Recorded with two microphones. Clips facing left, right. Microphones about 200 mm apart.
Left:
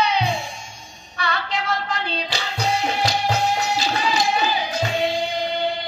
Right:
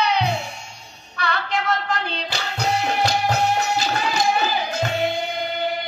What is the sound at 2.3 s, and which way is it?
Music, 65° right (ahead or behind).